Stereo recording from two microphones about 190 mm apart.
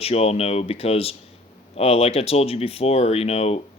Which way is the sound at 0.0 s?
35° left (ahead or behind).